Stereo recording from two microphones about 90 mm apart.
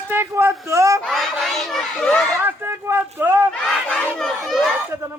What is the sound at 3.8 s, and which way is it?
Chatter, 15° left (ahead or behind).